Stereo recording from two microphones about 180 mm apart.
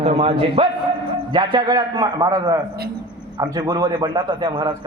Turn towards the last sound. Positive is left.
turn(degrees=-25)  # may be behind; listen again after turning